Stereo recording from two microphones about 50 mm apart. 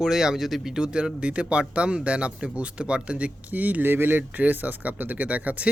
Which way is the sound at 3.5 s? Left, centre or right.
Right.